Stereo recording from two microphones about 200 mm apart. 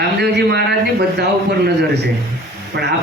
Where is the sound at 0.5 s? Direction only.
55° right (ahead or behind).